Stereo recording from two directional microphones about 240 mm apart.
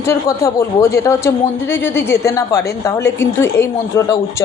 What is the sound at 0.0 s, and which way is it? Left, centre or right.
Speech, centre.